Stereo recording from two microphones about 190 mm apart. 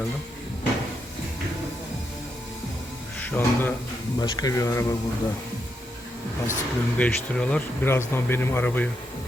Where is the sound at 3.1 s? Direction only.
10° left (ahead or behind).